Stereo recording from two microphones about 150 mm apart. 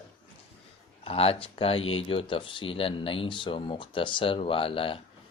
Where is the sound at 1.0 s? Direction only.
40° left (ahead or behind).